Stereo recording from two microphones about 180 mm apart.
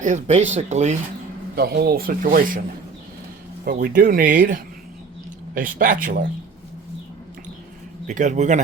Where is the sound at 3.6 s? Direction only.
50° right (ahead or behind).